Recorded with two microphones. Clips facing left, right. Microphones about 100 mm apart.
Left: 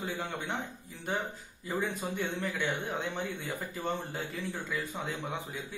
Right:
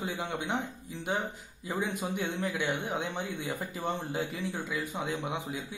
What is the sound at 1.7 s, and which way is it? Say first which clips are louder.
Speech: right 1 dB; 15° right (ahead or behind).